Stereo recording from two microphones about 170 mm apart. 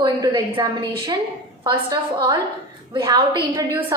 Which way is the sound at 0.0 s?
25° right (ahead or behind).